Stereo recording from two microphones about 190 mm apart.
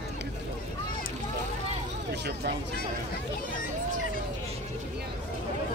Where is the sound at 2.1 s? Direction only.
60° right (ahead or behind).